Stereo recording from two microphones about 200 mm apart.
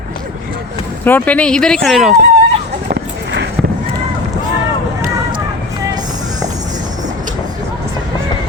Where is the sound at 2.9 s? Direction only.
55° right (ahead or behind).